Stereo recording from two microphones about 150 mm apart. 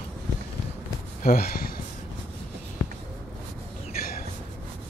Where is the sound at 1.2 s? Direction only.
70° left (ahead or behind).